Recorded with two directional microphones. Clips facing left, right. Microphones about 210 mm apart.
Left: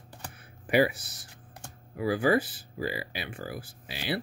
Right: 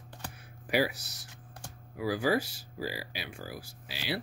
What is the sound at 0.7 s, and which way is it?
Speech, 55° left (ahead or behind).